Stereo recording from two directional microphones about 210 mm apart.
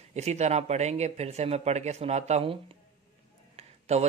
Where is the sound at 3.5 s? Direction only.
30° right (ahead or behind).